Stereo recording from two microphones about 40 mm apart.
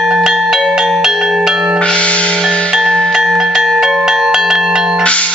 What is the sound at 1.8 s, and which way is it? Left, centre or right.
Music, left.